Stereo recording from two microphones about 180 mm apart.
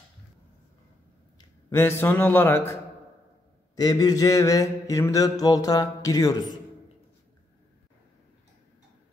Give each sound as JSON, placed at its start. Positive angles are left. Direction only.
{"t": 1.7, "sound": "a man's voice", "side_deg": 15}
{"t": 3.7, "sound": "mantra", "side_deg": 20}